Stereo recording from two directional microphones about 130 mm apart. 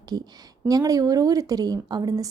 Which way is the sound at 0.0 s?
30° right (ahead or behind).